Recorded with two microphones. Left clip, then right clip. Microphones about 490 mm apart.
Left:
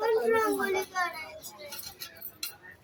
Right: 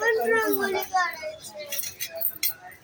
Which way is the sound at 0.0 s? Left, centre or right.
Left.